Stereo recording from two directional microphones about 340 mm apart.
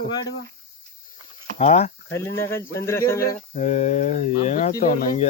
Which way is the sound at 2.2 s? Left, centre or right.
Centre.